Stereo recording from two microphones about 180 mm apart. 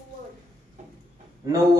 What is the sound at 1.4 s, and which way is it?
Speech, 20° right (ahead or behind).